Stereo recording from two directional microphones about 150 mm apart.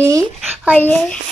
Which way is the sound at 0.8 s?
10° left (ahead or behind).